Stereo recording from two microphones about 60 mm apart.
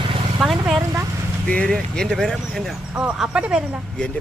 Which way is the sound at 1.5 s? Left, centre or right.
Centre.